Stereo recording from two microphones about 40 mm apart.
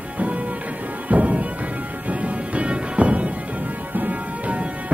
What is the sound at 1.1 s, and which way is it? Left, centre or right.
Music, right.